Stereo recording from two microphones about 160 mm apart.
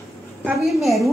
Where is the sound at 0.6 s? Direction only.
Centre (ahead or behind).